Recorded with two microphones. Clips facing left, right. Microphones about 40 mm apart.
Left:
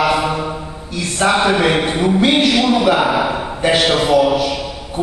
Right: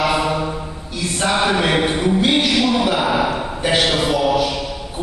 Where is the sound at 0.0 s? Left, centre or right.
Centre.